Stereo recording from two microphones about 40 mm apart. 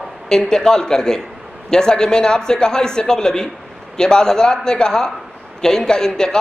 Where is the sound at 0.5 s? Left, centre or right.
Centre.